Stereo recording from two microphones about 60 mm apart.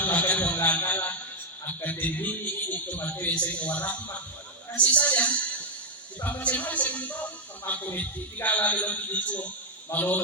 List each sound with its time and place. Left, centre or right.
0.0 s music: left
1.8 s a man's voice: left